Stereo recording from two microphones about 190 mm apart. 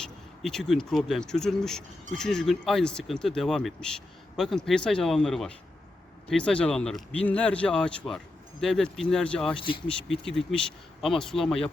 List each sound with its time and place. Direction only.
0.0 s speech: centre (ahead or behind)
9.6 s speech: 30° left (ahead or behind)
10.1 s speech: 5° left (ahead or behind)